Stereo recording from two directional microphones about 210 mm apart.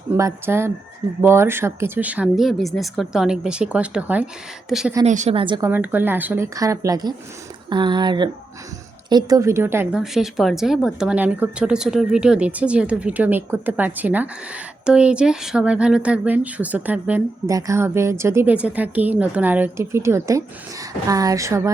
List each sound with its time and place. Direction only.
0.2 s a woman's voice: 15° right (ahead or behind)
5.0 s a woman's voice: 35° right (ahead or behind); by 21.7 s 15° right (ahead or behind)